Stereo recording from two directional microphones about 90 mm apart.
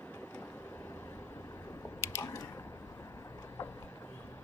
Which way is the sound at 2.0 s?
35° left (ahead or behind).